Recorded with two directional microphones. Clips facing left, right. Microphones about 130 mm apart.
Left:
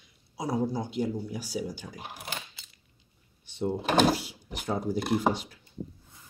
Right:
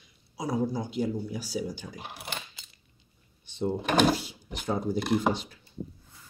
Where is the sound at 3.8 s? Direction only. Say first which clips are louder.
Even; 30° left (ahead or behind).